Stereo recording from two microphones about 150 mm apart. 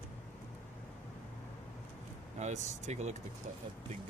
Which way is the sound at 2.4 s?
50° right (ahead or behind).